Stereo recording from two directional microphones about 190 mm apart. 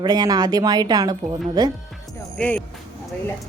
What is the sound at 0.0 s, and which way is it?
A woman's voice, 20° right (ahead or behind).